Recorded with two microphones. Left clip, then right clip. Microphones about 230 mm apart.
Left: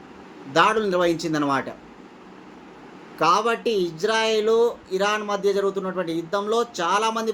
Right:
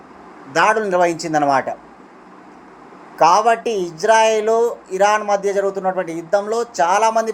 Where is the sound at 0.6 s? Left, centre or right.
Centre.